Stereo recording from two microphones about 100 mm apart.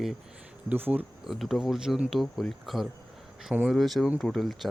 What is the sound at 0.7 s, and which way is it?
Speech, 20° right (ahead or behind).